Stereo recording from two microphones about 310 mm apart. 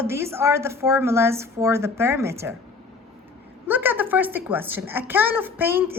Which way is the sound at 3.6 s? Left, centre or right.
Centre.